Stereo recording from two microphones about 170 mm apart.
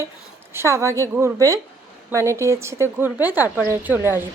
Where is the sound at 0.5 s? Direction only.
15° right (ahead or behind).